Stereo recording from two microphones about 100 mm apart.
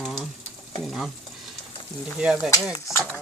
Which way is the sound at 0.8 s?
Centre (ahead or behind).